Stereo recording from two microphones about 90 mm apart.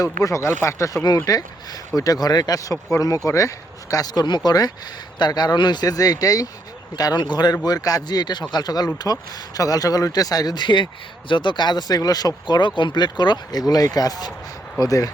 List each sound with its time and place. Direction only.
0.0 s speech: 40° left (ahead or behind)
1.0 s speech: 45° left (ahead or behind)